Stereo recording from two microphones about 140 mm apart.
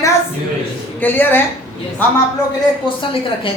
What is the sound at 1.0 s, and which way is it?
Speech, 15° left (ahead or behind).